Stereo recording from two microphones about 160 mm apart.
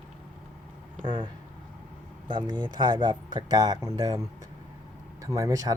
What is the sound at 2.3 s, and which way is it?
Speech, 30° right (ahead or behind).